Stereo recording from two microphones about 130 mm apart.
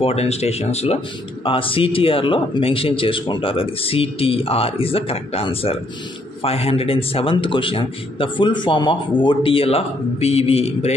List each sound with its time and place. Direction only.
0.0 s speech: 50° left (ahead or behind)
1.4 s speech: 40° left (ahead or behind)